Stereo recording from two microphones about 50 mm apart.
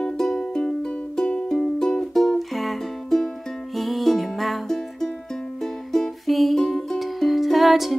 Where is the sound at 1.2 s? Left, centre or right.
Left.